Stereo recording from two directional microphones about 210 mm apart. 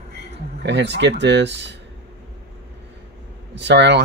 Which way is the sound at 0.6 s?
55° right (ahead or behind).